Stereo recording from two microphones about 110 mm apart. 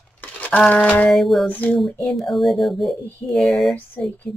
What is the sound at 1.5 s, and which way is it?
Speech, 15° left (ahead or behind).